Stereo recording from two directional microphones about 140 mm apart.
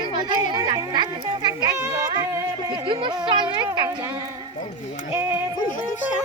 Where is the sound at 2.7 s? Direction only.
35° right (ahead or behind).